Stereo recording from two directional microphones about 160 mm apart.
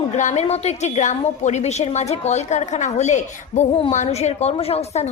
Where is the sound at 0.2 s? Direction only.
45° left (ahead or behind).